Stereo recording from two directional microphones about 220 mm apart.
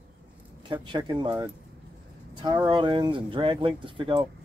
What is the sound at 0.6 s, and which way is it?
Speech, 20° right (ahead or behind).